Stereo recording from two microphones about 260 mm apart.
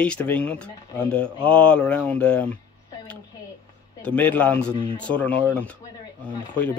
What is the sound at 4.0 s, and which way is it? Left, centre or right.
Speech, centre.